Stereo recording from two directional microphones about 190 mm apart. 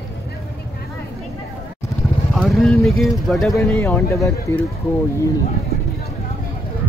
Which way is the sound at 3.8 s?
15° left (ahead or behind).